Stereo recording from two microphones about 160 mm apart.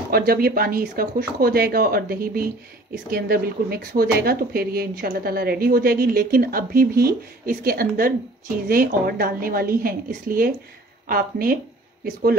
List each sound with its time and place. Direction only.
0.1 s speech: 70° right (ahead or behind)